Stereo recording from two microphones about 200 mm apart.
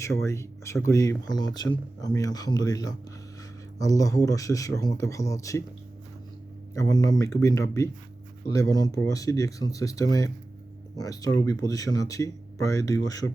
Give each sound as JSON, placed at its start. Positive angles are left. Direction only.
{"t": 0.2, "sound": "speech", "side_deg": 15}
{"t": 6.7, "sound": "speech", "side_deg": 15}